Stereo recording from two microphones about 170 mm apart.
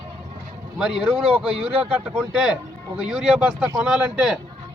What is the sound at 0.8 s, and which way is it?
Speech, centre (ahead or behind).